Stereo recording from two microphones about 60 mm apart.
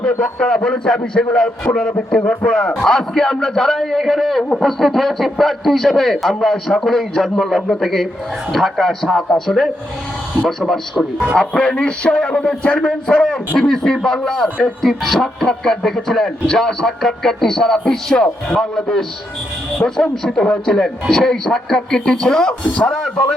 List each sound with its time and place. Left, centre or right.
0.0 s speech: centre
10.6 s speech: centre
11.3 s speech: centre